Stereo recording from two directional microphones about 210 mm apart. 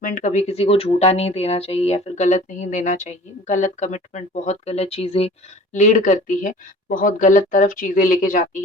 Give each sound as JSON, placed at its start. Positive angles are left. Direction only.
{"t": 0.0, "sound": "speech", "side_deg": 40}